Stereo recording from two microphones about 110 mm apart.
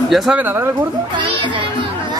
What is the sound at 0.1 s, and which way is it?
Speech, centre (ahead or behind).